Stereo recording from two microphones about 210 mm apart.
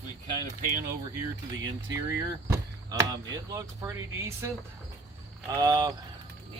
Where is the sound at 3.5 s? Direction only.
15° right (ahead or behind).